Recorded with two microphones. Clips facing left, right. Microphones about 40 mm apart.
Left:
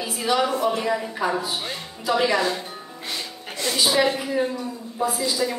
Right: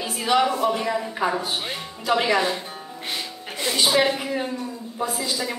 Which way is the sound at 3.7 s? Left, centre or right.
Right.